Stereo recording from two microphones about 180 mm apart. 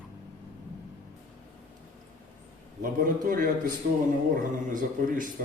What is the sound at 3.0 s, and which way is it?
Speech, 50° right (ahead or behind).